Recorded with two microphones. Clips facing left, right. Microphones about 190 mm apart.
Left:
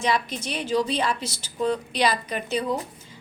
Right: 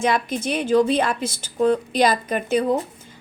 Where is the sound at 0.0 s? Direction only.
50° right (ahead or behind).